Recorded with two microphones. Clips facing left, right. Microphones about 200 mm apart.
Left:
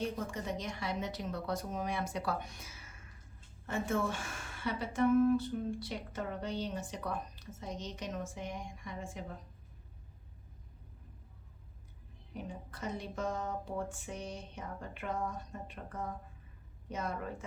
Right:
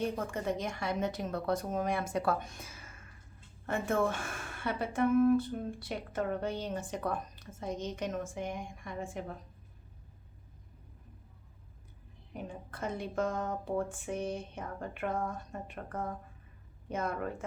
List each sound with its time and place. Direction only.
0.3 s a woman's voice: 55° right (ahead or behind)
12.3 s a woman's voice: 55° right (ahead or behind)